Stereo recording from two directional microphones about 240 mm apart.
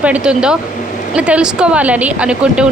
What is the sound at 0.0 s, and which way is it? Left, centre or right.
A woman's voice, centre.